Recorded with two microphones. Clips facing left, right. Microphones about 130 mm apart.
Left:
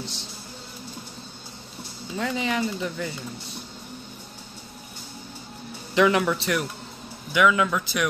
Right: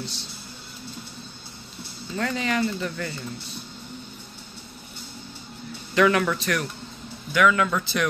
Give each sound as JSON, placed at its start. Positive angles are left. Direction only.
{"t": 2.1, "sound": "speech", "side_deg": 15}
{"t": 5.9, "sound": "speech", "side_deg": 15}